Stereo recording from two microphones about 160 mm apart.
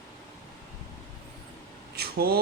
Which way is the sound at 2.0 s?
80° right.